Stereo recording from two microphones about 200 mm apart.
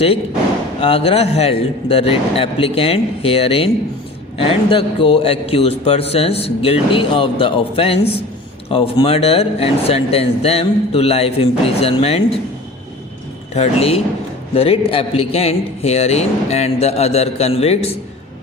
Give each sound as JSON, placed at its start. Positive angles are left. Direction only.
{"t": 0.8, "sound": "speech", "side_deg": 30}
{"t": 13.5, "sound": "a man's voice", "side_deg": 30}